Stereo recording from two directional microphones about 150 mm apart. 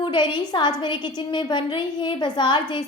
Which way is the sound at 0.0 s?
30° left (ahead or behind).